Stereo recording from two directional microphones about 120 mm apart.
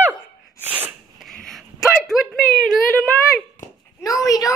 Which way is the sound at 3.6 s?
90° left.